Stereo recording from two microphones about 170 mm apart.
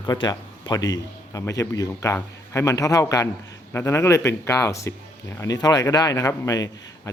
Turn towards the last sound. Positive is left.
turn(degrees=20)  # may be behind; listen again after turning